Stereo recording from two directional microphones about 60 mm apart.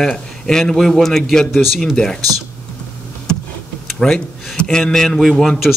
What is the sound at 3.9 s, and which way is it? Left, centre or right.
Speech, centre.